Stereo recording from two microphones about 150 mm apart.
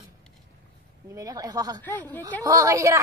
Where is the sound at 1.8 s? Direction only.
10° left (ahead or behind).